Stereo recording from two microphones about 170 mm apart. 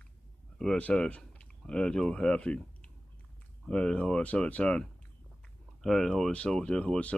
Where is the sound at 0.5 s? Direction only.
5° left (ahead or behind).